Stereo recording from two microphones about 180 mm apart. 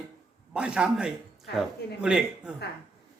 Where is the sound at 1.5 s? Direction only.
70° left (ahead or behind).